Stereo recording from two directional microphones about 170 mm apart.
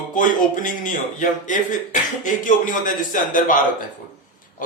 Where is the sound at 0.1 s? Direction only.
50° left (ahead or behind).